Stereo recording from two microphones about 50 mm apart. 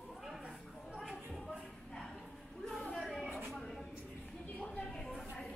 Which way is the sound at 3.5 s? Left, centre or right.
Centre.